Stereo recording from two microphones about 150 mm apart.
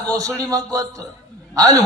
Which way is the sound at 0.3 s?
25° right (ahead or behind).